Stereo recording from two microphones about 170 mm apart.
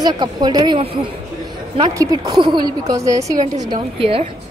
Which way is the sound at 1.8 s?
20° right (ahead or behind).